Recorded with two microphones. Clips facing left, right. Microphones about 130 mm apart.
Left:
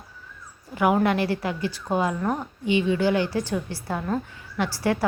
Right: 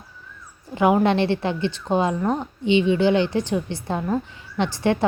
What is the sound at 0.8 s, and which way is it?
A woman's voice, 25° right (ahead or behind).